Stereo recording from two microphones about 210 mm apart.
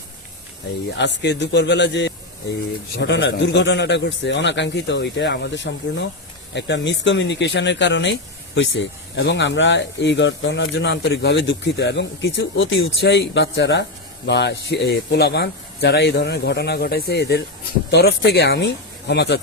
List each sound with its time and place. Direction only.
0.9 s speech: 55° left (ahead or behind)